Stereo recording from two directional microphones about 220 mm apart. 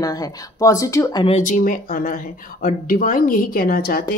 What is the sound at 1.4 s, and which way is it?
Speech, 35° left (ahead or behind).